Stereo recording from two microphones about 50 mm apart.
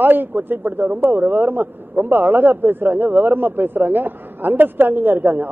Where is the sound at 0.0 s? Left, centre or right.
Right.